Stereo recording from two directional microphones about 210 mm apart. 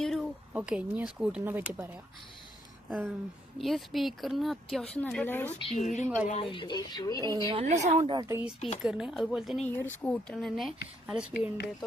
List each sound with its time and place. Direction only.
0.0 s speech: centre (ahead or behind)
3.6 s speech: centre (ahead or behind)
5.6 s a woman's voice: 30° left (ahead or behind); by 7.4 s 15° left (ahead or behind)
7.4 s speech: 30° right (ahead or behind); by 11.3 s 5° right (ahead or behind)
11.3 s speech: 50° left (ahead or behind)